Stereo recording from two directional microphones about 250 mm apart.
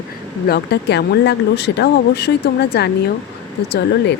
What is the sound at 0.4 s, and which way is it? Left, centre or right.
Speech, left.